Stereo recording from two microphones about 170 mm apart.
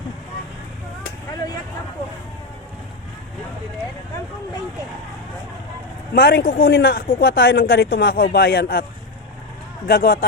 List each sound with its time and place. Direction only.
6.1 s speech: 65° left (ahead or behind)
9.8 s speech: 65° left (ahead or behind)